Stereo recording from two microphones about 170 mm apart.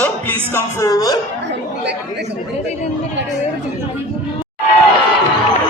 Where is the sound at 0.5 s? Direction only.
20° left (ahead or behind).